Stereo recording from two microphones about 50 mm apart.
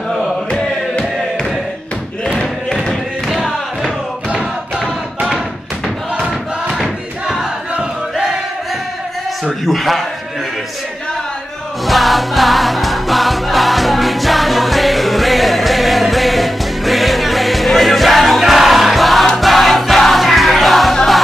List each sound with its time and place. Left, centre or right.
2.2 s thump: centre
3.3 s music: centre
4.3 s a sound: centre
6.7 s crowd: centre
9.7 s a man's voice: centre
11.8 s music: centre